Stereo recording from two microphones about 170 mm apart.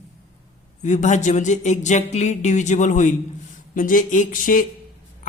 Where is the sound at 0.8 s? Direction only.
45° left (ahead or behind).